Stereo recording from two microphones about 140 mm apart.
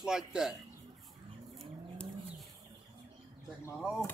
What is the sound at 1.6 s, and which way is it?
Livestock, centre (ahead or behind).